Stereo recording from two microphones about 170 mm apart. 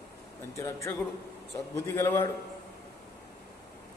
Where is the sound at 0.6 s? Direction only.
15° left (ahead or behind).